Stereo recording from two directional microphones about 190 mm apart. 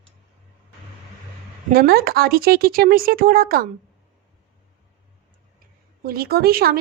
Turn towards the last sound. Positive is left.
turn(degrees=-55)  # may be behind; listen again after turning